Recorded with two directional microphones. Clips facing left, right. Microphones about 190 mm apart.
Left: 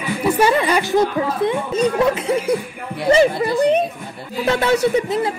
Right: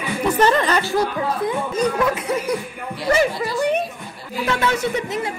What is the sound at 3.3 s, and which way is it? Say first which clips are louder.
Speech: left 5 dB; 55° left (ahead or behind).